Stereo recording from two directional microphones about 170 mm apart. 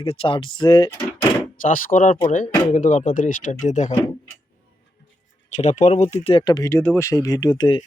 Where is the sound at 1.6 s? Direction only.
55° left (ahead or behind).